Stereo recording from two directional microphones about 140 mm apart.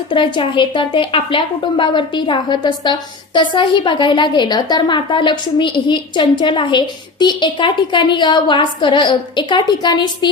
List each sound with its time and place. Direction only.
0.1 s a woman's voice: 35° left (ahead or behind)